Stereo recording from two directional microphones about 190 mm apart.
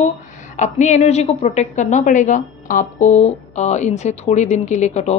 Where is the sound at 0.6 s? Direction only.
40° left (ahead or behind).